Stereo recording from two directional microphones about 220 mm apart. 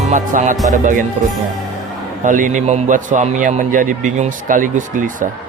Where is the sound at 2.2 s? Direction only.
35° right (ahead or behind).